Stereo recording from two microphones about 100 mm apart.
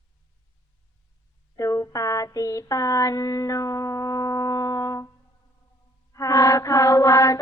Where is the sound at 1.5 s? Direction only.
35° left (ahead or behind).